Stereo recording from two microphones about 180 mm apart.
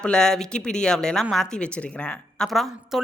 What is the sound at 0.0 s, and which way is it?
Speech, 5° left (ahead or behind).